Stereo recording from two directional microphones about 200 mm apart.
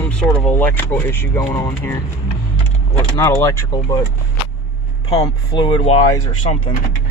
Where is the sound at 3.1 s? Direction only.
15° left (ahead or behind).